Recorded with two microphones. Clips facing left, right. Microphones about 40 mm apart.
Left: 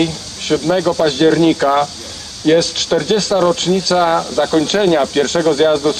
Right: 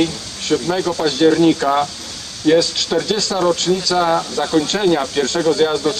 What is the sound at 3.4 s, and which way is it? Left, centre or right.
A man's voice, left.